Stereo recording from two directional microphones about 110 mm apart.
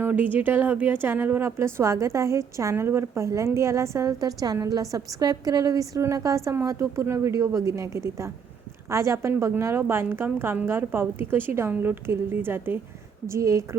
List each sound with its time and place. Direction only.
0.0 s a woman's voice: 15° right (ahead or behind)